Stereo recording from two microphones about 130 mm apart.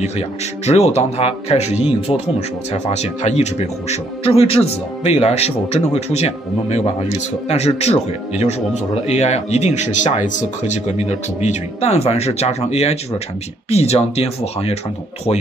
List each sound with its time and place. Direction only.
0.0 s speech: 55° left (ahead or behind)